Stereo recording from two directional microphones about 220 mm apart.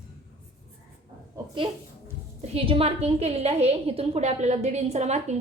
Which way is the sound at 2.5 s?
25° right (ahead or behind).